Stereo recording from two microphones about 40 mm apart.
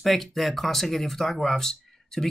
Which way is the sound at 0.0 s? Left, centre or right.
Centre.